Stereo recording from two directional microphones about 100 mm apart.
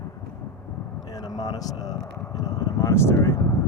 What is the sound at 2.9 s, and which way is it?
Speech, 25° left (ahead or behind).